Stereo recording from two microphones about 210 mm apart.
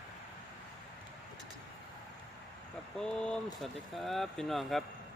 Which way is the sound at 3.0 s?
5° left (ahead or behind).